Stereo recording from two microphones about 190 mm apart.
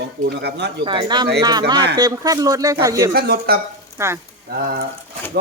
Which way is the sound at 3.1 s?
55° right (ahead or behind).